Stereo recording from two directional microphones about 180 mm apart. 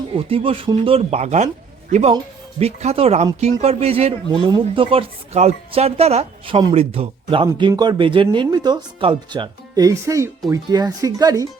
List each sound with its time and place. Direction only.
0.2 s speech: 30° right (ahead or behind)
7.4 s speech: 20° right (ahead or behind)